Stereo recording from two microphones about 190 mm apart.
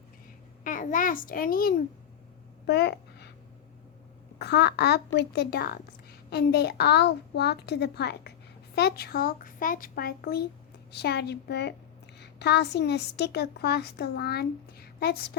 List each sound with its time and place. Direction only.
0.6 s a child's voice: 45° left (ahead or behind)
2.6 s a sound: 60° left (ahead or behind)
4.4 s a woman's voice: 60° left (ahead or behind)